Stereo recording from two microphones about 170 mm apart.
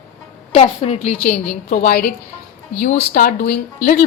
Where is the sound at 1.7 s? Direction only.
60° left (ahead or behind).